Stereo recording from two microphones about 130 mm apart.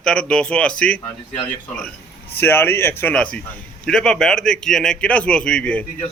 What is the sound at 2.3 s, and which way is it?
A man's voice, 15° left (ahead or behind).